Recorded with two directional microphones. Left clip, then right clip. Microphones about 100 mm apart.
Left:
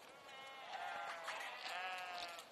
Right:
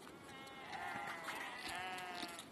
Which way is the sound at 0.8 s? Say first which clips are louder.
Right 1 dB; 5° right (ahead or behind).